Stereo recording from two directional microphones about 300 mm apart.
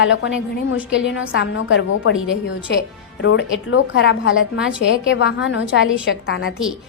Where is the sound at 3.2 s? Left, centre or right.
Left.